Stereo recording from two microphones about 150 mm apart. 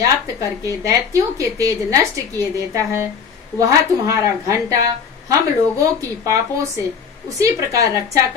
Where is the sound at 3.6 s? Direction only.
20° right (ahead or behind).